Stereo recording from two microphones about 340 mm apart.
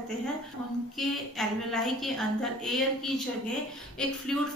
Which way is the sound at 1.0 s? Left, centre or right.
Centre.